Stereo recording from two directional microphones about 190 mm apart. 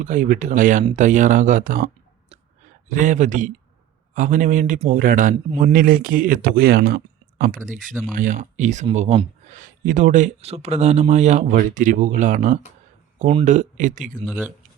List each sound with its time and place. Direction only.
0.0 s speech: 40° right (ahead or behind)
2.9 s speech: 40° right (ahead or behind)